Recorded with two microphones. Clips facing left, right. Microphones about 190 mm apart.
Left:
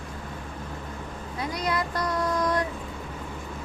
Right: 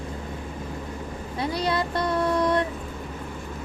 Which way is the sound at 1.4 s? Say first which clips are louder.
Right 3 dB; 30° right (ahead or behind).